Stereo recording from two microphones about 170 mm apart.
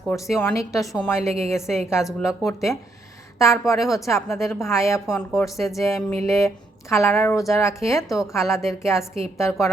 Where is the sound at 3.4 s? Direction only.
20° left (ahead or behind).